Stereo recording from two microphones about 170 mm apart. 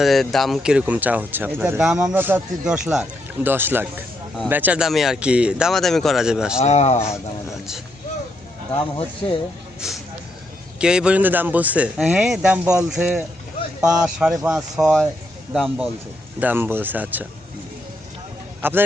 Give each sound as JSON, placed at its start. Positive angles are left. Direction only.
{"t": 0.0, "sound": "speech", "side_deg": 0}
{"t": 6.6, "sound": "speech", "side_deg": 40}
{"t": 7.0, "sound": "speech", "side_deg": 15}
{"t": 9.8, "sound": "speech", "side_deg": -5}
{"t": 18.6, "sound": "speech", "side_deg": -10}